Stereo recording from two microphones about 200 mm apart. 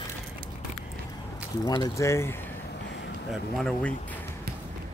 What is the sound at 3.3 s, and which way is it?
Speech, centre (ahead or behind).